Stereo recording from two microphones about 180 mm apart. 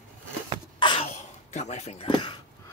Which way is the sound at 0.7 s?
25° left (ahead or behind).